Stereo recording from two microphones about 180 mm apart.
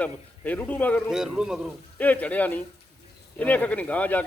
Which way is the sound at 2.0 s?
10° left (ahead or behind).